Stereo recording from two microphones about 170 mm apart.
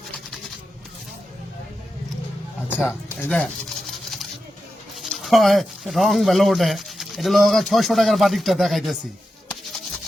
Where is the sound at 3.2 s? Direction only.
10° left (ahead or behind).